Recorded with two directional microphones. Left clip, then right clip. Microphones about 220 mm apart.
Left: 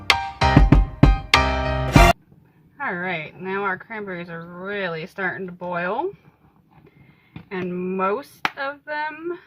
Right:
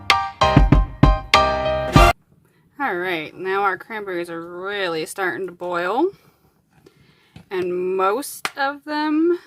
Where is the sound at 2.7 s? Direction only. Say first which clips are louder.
Right 3 dB; 55° right (ahead or behind).